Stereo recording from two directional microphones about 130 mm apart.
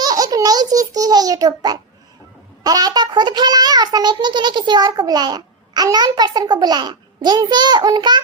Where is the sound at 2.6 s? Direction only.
30° right (ahead or behind).